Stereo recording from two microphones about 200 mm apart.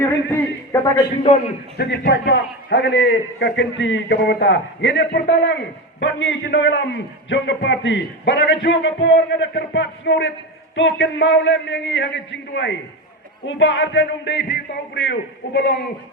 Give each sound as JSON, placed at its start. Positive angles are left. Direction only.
{"t": 0.0, "sound": "a man's voice", "side_deg": 10}
{"t": 1.8, "sound": "a man's voice", "side_deg": 55}
{"t": 13.4, "sound": "music", "side_deg": 70}
{"t": 14.9, "sound": "a man's voice", "side_deg": 65}